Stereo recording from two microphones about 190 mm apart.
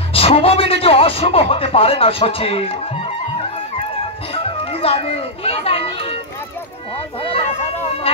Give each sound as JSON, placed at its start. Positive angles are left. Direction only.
{"t": 0.1, "sound": "a child's voice", "side_deg": 30}